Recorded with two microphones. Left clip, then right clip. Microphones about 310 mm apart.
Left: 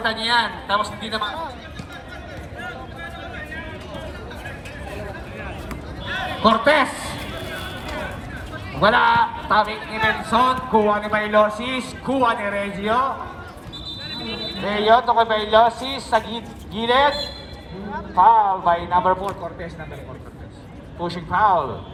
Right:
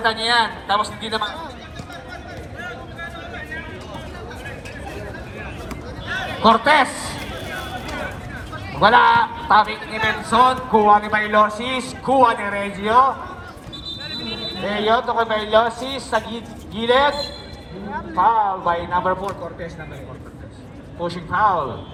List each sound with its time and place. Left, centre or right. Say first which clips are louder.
0.0 s speech: right 2 dB; centre
6.2 s a man's voice: right 2 dB; centre
8.7 s a man's voice: right 3 dB; centre
14.6 s a man's voice: left 3 dB; centre
18.2 s a man's voice: left 3 dB; left
21.0 s a man's voice: even; left